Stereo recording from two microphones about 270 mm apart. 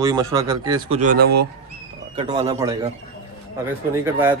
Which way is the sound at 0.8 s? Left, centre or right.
Right.